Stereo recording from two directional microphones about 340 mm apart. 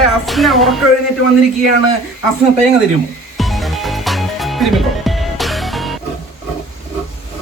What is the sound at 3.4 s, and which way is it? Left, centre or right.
Music, centre.